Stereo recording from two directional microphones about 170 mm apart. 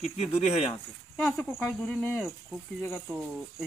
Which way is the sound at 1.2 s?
5° left (ahead or behind).